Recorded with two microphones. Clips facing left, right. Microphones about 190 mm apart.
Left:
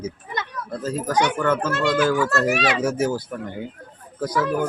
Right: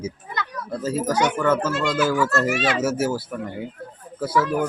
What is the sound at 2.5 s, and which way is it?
Speech, 65° left (ahead or behind).